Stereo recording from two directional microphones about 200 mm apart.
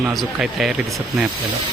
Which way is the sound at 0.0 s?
Centre (ahead or behind).